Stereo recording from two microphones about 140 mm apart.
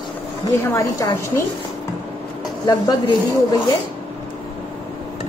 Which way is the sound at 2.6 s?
30° left (ahead or behind).